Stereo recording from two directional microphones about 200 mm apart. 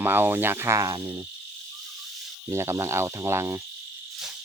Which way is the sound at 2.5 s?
15° right (ahead or behind).